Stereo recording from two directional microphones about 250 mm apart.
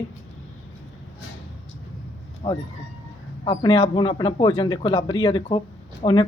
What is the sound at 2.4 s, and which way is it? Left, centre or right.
A man's voice, left.